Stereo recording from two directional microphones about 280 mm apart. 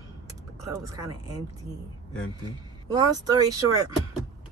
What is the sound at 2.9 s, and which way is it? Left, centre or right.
Speech, centre.